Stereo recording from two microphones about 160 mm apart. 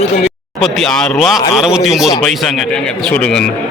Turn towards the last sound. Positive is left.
turn(degrees=5)  # may be behind; listen again after turning